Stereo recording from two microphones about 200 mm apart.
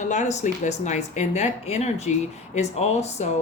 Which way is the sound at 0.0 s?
35° left (ahead or behind).